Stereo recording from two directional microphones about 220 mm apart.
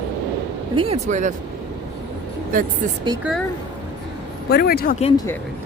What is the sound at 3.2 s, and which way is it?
Speech, centre (ahead or behind).